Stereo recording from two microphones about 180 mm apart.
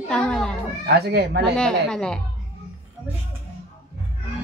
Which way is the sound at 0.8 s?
65° right (ahead or behind).